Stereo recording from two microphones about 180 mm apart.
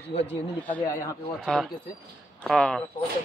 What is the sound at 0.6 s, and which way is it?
Speech, 10° left (ahead or behind).